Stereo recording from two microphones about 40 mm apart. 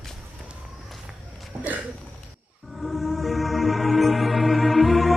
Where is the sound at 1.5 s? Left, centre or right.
Right.